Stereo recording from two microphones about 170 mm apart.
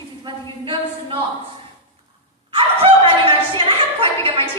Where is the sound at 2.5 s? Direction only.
30° right (ahead or behind).